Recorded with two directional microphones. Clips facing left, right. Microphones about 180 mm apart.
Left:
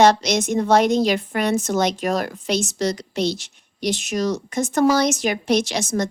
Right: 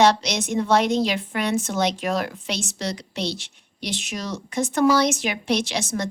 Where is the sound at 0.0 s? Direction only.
45° left (ahead or behind).